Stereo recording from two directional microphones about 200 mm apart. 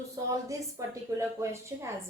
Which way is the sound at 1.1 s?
15° right (ahead or behind).